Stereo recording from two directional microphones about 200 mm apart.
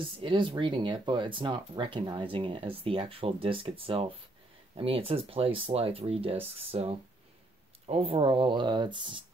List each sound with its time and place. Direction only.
0.0 s speech: 25° right (ahead or behind)